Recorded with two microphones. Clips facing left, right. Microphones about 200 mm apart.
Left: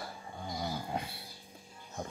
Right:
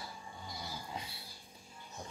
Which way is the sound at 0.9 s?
60° left (ahead or behind).